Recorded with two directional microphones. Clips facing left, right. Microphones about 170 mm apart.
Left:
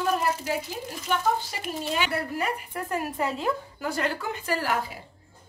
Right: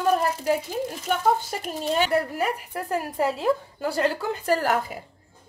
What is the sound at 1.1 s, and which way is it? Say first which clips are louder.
Speech: right 2 dB; 45° right (ahead or behind).